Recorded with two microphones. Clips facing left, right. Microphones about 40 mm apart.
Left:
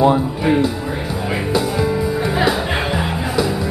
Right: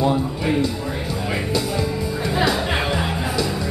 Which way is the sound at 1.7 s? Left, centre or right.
Centre.